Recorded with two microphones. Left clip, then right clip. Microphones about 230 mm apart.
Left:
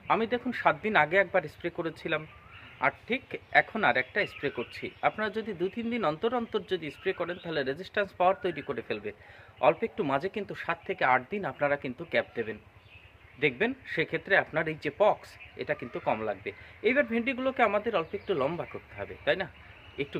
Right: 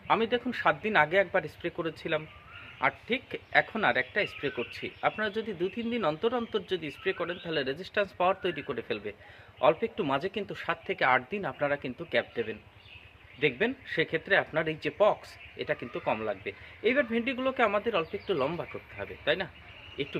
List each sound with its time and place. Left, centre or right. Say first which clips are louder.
0.1 s a man's voice: right 1 dB; centre